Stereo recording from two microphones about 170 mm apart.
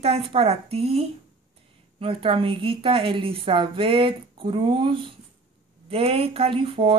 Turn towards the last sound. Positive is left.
turn(degrees=-35)  # may be behind; listen again after turning